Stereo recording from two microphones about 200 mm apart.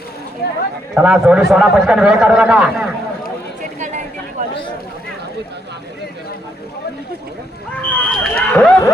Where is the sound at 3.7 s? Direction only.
35° right (ahead or behind).